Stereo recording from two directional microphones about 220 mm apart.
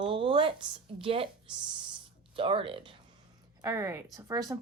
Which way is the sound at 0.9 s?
25° right (ahead or behind).